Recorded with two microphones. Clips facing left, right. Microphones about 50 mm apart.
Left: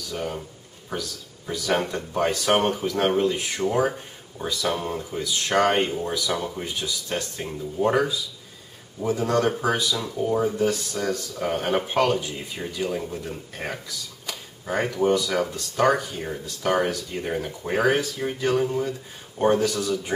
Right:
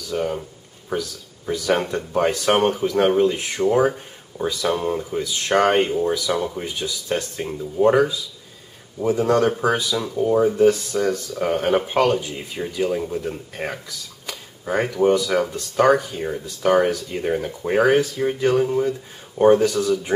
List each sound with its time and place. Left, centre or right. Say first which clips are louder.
0.1 s speech: right 7 dB; centre
14.2 s a sound: right 5 dB; centre
15.1 s speech: right 4 dB; centre